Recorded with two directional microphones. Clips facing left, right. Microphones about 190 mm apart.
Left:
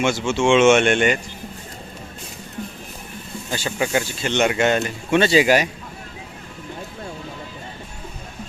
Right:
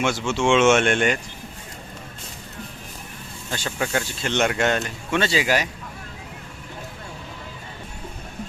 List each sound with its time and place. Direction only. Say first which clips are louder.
0.0 s speech: left 3 dB; centre (ahead or behind)
3.5 s speech: left 3 dB; 5° left (ahead or behind)
5.1 s speech: left 6 dB; 15° left (ahead or behind)